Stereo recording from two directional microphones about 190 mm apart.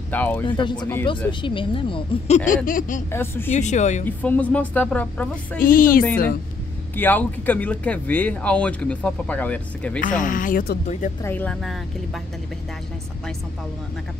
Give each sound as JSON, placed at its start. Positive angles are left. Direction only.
{"t": 0.1, "sound": "speech", "side_deg": 10}
{"t": 0.5, "sound": "speech", "side_deg": 25}
{"t": 0.7, "sound": "speech", "side_deg": 10}
{"t": 1.4, "sound": "speech", "side_deg": 25}
{"t": 3.1, "sound": "speech", "side_deg": 10}
{"t": 3.5, "sound": "speech", "side_deg": 40}
{"t": 4.0, "sound": "speech", "side_deg": 10}
{"t": 5.6, "sound": "speech", "side_deg": 50}
{"t": 7.0, "sound": "speech", "side_deg": 10}
{"t": 9.9, "sound": "speech", "side_deg": 45}
{"t": 11.2, "sound": "speech", "side_deg": 10}